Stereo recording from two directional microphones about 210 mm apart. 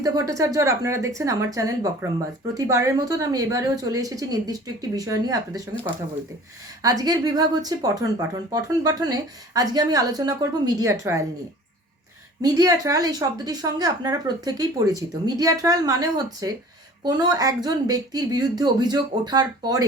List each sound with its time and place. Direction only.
0.0 s a woman's voice: 15° right (ahead or behind)
6.8 s a woman's voice: 20° right (ahead or behind)
12.4 s a woman's voice: 15° right (ahead or behind)